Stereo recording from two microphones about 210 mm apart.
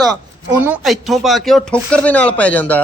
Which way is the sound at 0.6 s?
5° right (ahead or behind).